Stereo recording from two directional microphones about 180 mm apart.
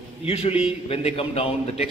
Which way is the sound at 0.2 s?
35° left (ahead or behind).